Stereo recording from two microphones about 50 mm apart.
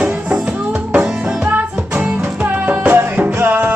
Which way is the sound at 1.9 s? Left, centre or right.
Right.